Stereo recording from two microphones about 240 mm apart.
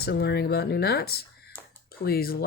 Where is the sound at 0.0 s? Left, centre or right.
Left.